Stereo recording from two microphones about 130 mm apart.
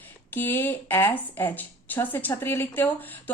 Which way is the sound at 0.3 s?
15° left (ahead or behind).